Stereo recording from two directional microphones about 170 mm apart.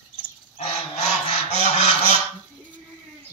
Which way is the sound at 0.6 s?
40° left (ahead or behind).